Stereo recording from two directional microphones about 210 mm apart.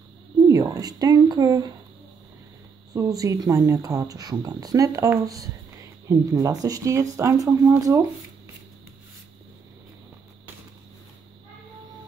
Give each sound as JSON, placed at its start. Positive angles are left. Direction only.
{"t": 0.5, "sound": "speech", "side_deg": -15}
{"t": 2.9, "sound": "speech", "side_deg": -15}